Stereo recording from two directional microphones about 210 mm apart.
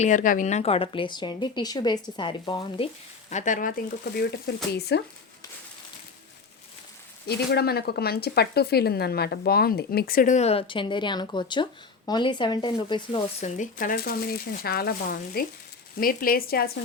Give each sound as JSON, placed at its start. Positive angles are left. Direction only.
{"t": 0.0, "sound": "speech", "side_deg": 35}
{"t": 7.3, "sound": "speech", "side_deg": 50}